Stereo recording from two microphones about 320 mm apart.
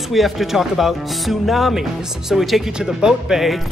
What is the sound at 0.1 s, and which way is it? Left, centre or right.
Speech, centre.